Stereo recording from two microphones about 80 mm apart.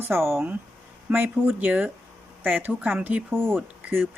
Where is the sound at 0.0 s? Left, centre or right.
Right.